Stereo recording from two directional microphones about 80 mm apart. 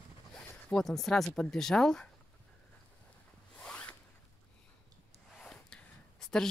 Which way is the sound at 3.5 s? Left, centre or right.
Centre.